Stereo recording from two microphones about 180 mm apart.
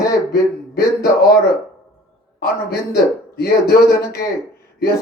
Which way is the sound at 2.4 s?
60° left (ahead or behind).